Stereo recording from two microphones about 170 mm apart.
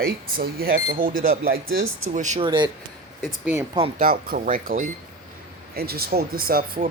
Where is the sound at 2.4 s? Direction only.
30° right (ahead or behind).